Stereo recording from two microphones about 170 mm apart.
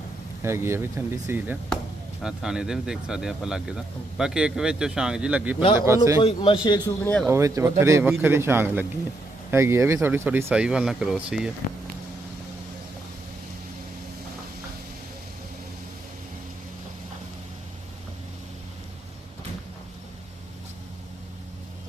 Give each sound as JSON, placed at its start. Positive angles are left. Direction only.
{"t": 0.4, "sound": "speech", "side_deg": -15}
{"t": 6.2, "sound": "a man's voice", "side_deg": 30}
{"t": 7.0, "sound": "speech", "side_deg": 10}
{"t": 7.3, "sound": "speech", "side_deg": -15}